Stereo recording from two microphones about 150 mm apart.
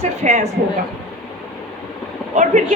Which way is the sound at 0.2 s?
55° right (ahead or behind).